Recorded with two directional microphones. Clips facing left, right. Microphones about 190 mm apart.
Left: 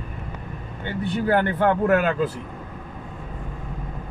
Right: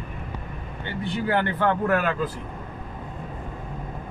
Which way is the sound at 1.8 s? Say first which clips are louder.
Left 4 dB; 30° left (ahead or behind).